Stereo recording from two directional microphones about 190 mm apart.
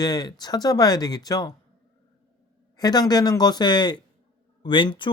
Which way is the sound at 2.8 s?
20° left (ahead or behind).